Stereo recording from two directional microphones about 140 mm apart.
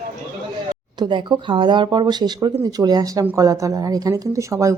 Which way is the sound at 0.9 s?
35° right (ahead or behind).